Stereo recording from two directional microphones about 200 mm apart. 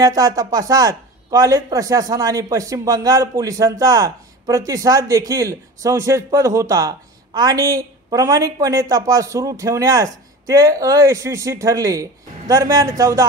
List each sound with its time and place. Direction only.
0.0 s speech: 15° right (ahead or behind)